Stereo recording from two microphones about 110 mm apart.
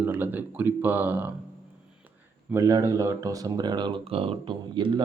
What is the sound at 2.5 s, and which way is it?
Speech, 30° right (ahead or behind).